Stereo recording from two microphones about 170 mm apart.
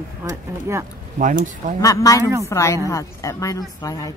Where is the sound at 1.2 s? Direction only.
50° right (ahead or behind).